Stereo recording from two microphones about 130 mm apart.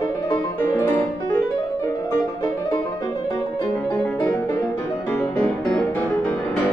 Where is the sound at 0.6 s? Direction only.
15° left (ahead or behind).